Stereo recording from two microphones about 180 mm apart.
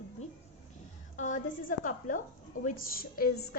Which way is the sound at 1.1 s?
45° left (ahead or behind).